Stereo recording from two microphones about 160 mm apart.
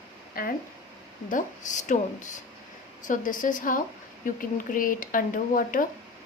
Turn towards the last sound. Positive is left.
turn(degrees=55)  # may be behind; listen again after turning